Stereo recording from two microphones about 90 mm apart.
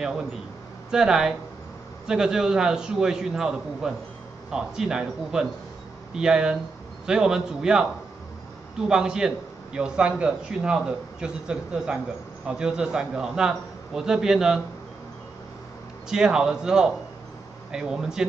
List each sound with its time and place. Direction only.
0.0 s a man's voice: 5° right (ahead or behind)
16.1 s a man's voice: 5° right (ahead or behind)